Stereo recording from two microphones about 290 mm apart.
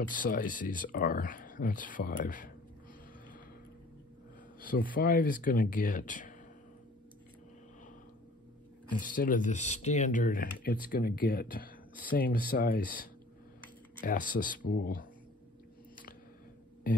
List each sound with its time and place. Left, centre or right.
0.1 s speech: left
4.6 s speech: left
9.0 s speech: left